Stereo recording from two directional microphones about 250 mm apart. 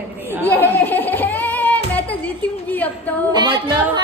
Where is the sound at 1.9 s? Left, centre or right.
Centre.